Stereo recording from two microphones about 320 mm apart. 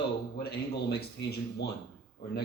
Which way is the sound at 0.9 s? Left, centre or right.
Left.